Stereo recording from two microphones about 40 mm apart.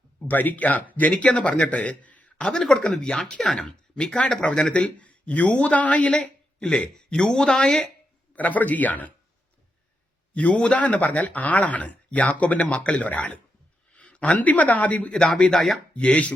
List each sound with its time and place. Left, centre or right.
0.3 s speech: left
1.2 s a man's voice: left
2.4 s speech: centre
3.4 s speech: centre
3.9 s speech: centre
4.5 s speech: left
6.6 s speech: left
8.4 s a man's voice: left
10.3 s speech: left
15.4 s speech: left